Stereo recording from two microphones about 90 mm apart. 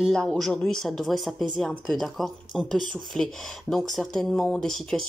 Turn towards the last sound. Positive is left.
turn(degrees=5)  # may be behind; listen again after turning